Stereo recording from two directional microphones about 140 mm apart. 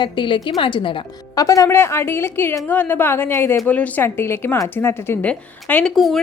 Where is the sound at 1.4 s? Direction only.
25° left (ahead or behind).